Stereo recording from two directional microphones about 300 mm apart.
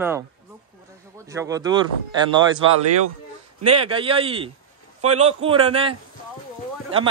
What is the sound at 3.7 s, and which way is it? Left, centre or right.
A man's voice, centre.